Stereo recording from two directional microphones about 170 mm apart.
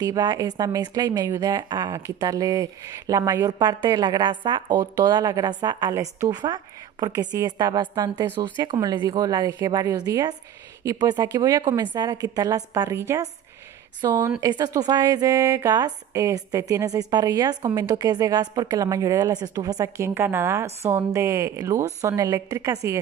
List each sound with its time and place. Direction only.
0.0 s a woman's voice: 25° right (ahead or behind)